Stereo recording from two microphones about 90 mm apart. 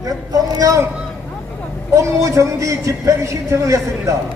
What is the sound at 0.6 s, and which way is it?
Speech, 35° right (ahead or behind).